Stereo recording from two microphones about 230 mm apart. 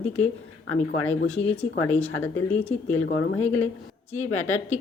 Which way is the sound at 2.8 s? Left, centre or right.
Left.